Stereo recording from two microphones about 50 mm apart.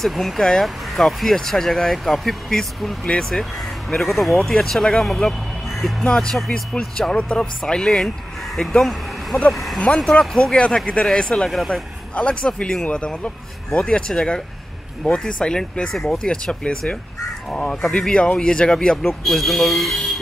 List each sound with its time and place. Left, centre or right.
0.0 s speech: centre
5.7 s music: centre
6.0 s speech: centre
10.1 s speech: centre
11.5 s speech: centre
12.2 s speech: left
17.9 s speech: centre